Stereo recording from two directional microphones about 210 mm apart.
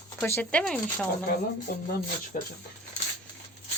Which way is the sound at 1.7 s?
45° left (ahead or behind).